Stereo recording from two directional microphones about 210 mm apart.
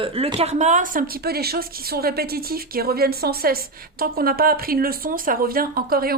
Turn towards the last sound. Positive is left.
turn(degrees=-45)  # may be behind; listen again after turning